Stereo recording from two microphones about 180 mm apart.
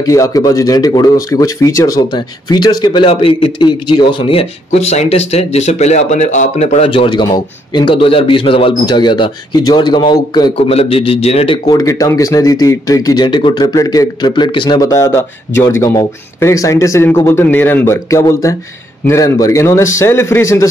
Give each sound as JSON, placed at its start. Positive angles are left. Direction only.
{"t": 0.0, "sound": "speech", "side_deg": 20}
{"t": 11.8, "sound": "speech", "side_deg": 15}